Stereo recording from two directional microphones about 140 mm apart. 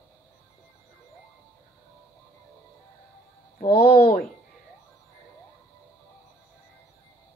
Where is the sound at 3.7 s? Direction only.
90° left.